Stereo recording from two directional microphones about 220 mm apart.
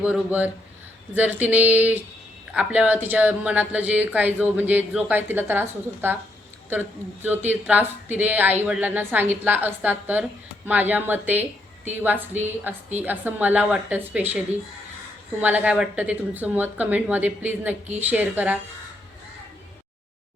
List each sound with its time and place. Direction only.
0.0 s speech: 5° right (ahead or behind)
15.4 s speech: 5° right (ahead or behind)